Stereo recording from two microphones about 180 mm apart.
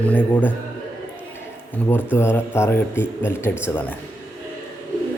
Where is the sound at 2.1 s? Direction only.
10° left (ahead or behind).